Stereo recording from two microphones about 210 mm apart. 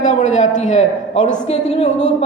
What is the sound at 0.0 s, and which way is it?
A woman's voice, 35° left (ahead or behind).